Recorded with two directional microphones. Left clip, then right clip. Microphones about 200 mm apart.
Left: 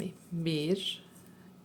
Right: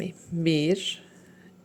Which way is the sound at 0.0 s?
25° right (ahead or behind).